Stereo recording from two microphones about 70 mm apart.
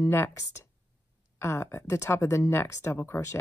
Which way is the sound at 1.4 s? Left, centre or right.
Left.